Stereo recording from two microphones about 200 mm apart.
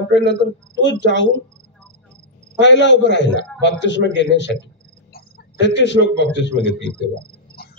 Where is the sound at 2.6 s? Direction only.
65° left (ahead or behind).